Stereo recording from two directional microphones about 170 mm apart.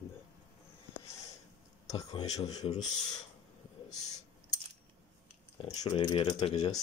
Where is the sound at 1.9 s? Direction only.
20° left (ahead or behind).